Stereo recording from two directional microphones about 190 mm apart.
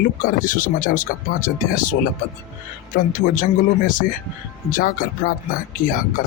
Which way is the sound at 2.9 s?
50° left (ahead or behind).